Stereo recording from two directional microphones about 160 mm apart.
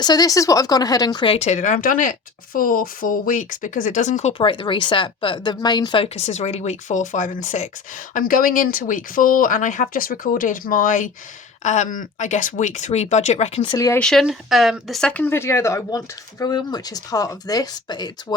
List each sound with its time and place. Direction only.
0.0 s speech: 25° left (ahead or behind); by 4.4 s 45° left (ahead or behind)
4.4 s speech: 30° left (ahead or behind)
13.7 s speech: 20° left (ahead or behind)
14.0 s speech: centre (ahead or behind); by 18.3 s 25° left (ahead or behind)